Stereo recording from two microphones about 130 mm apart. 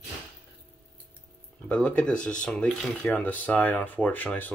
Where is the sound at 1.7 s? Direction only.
10° left (ahead or behind).